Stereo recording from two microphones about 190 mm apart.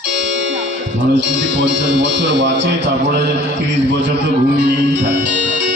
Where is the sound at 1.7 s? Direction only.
65° right (ahead or behind).